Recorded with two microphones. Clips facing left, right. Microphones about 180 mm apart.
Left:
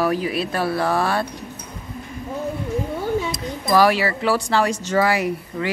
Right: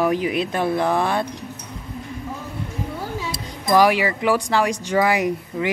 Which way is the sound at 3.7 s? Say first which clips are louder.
Even; 15° right (ahead or behind).